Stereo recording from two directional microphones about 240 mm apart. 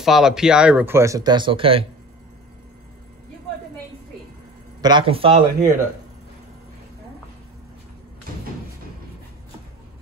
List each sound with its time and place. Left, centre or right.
0.0 s speech: centre; by 1.9 s right
4.8 s speech: right